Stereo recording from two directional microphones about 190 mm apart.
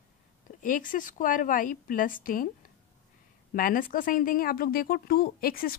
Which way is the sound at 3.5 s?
45° left (ahead or behind).